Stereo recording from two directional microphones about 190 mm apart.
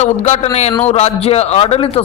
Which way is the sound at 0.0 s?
35° left (ahead or behind).